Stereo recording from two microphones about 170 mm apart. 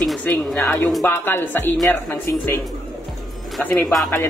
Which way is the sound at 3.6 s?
5° left (ahead or behind).